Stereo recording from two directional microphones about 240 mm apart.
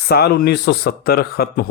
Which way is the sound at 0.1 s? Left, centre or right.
Left.